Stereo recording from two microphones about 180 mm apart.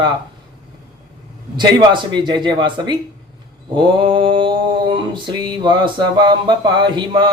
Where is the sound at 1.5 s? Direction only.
25° right (ahead or behind).